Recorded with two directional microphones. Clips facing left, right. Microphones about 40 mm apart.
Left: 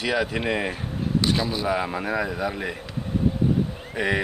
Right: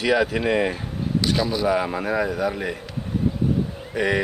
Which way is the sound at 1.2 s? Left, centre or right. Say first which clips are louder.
Right 4 dB; centre.